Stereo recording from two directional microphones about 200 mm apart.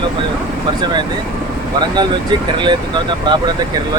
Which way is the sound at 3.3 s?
20° right (ahead or behind).